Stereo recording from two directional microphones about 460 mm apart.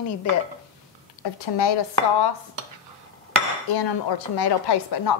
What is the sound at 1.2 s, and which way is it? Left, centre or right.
Speech, left.